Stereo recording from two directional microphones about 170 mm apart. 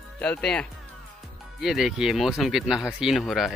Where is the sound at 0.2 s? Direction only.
5° left (ahead or behind).